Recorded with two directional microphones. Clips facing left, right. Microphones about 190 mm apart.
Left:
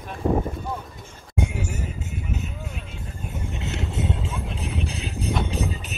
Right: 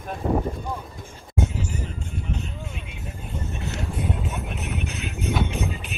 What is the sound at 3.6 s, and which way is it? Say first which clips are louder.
Music: left 1 dB; 25° left (ahead or behind).